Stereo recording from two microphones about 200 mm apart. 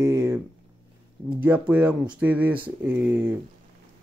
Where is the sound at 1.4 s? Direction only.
10° right (ahead or behind).